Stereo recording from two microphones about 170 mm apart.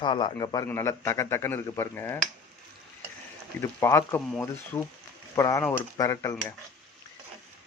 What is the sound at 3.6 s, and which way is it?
A man's voice, 20° left (ahead or behind).